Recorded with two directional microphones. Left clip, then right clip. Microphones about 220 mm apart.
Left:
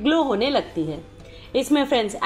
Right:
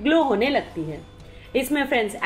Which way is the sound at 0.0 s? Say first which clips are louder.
Right 1 dB; 15° left (ahead or behind).